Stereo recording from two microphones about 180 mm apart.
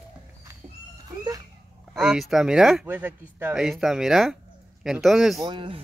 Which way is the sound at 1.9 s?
5° right (ahead or behind).